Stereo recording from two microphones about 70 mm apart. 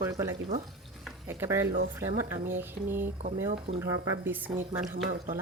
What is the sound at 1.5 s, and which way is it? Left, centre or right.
Speech, right.